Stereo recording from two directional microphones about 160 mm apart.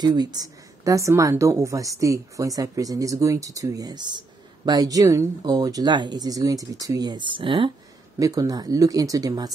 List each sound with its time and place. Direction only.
0.0 s a woman's voice: 25° right (ahead or behind)
8.2 s a woman's voice: 20° right (ahead or behind)